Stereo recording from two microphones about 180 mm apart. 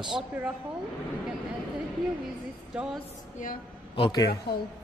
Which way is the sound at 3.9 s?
25° left (ahead or behind).